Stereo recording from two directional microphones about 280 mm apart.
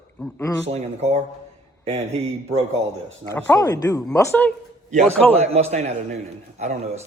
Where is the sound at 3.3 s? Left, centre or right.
Centre.